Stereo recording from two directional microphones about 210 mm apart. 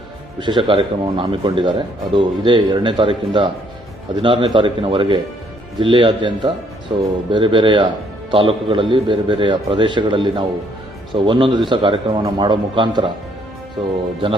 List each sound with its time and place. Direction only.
0.3 s a man's voice: 20° right (ahead or behind)